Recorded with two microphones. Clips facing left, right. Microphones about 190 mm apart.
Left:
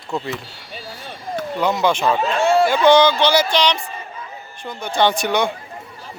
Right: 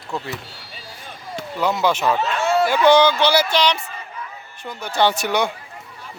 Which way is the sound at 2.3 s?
30° left (ahead or behind).